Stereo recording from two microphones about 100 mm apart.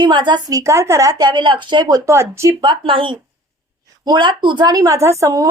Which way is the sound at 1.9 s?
35° right (ahead or behind).